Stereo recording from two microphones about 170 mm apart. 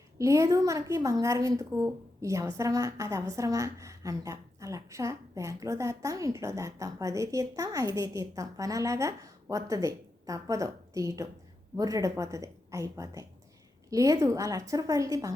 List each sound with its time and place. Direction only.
0.2 s a woman's voice: 15° right (ahead or behind)